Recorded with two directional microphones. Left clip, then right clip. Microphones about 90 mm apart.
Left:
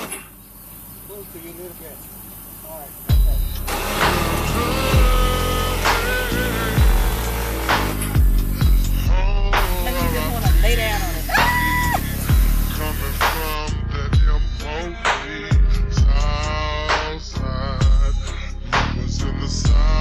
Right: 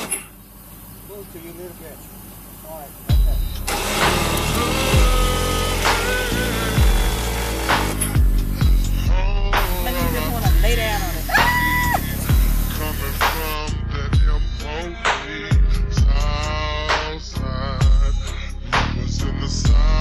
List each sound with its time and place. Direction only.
3.6 s vehicle: 35° right (ahead or behind)
4.6 s music: 40° right (ahead or behind)
5.0 s music: 45° left (ahead or behind)
5.4 s music: 40° right (ahead or behind)
5.8 s music: 40° left (ahead or behind)
6.7 s music: 35° right (ahead or behind)
8.1 s music: 45° left (ahead or behind)
10.6 s music: centre (ahead or behind)
11.4 s music: 40° left (ahead or behind)
15.0 s music: centre (ahead or behind)
15.2 s music: 40° left (ahead or behind)